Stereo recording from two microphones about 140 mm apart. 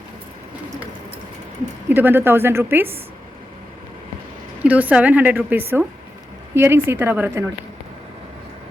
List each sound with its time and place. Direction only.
1.9 s a woman's voice: 15° right (ahead or behind)
4.6 s a woman's voice: 10° right (ahead or behind)